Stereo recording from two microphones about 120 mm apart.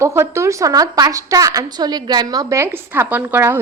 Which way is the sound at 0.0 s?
20° right (ahead or behind).